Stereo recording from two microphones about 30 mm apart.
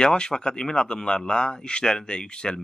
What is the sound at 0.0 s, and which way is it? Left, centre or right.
Speech, left.